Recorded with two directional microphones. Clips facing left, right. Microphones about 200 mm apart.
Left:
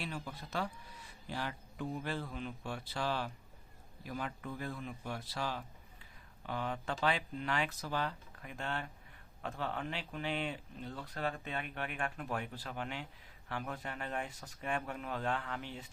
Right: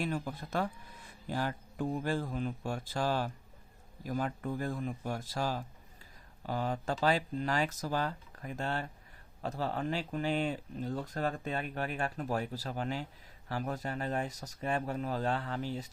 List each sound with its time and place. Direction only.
0.0 s speech: 50° right (ahead or behind)